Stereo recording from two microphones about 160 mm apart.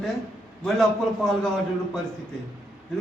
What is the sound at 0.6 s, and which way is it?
Speech, centre (ahead or behind).